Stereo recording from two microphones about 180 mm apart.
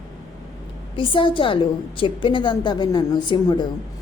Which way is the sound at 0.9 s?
30° left (ahead or behind).